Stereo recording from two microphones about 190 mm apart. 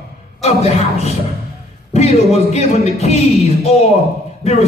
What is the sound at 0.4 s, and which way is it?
Speech, 35° left (ahead or behind).